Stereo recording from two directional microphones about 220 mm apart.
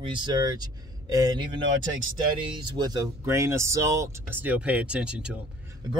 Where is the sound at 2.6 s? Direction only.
20° right (ahead or behind).